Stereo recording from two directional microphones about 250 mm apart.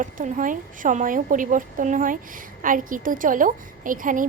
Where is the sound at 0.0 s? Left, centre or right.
Right.